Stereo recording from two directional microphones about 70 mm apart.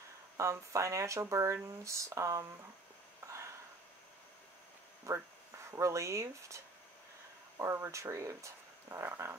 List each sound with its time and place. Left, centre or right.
0.4 s speech: right
3.3 s a sound: right
5.7 s speech: right